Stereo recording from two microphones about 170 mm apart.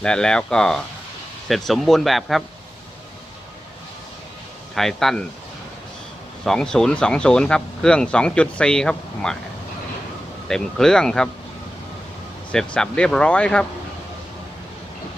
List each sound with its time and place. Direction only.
0.0 s speech: 5° left (ahead or behind)
4.7 s speech: centre (ahead or behind)
6.4 s speech: 5° left (ahead or behind)
10.5 s speech: 5° left (ahead or behind)
12.5 s speech: 5° left (ahead or behind)